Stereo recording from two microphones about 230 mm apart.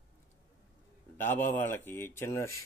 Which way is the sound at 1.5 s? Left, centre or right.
Centre.